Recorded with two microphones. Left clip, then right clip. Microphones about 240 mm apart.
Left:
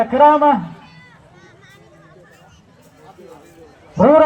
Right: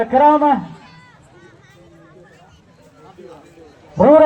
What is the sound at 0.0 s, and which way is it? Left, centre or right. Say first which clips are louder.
Speech: left 1 dB; left.